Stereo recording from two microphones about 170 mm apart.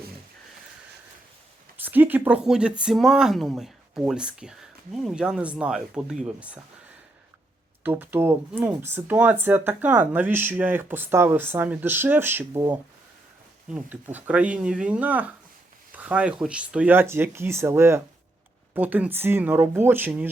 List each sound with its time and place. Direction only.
1.8 s speech: 10° right (ahead or behind)
7.9 s speech: 10° right (ahead or behind)
13.7 s speech: 10° right (ahead or behind)